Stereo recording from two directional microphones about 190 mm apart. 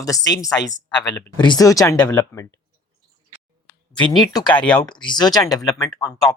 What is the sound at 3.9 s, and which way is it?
Speech, 25° left (ahead or behind).